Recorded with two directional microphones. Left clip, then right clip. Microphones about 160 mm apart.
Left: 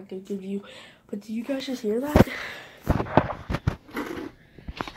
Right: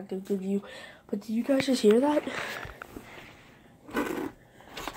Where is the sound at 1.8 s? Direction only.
65° right (ahead or behind).